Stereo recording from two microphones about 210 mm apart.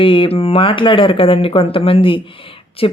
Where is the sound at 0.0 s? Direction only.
25° left (ahead or behind).